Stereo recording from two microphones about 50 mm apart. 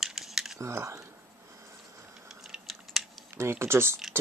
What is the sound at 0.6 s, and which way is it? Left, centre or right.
Speech, right.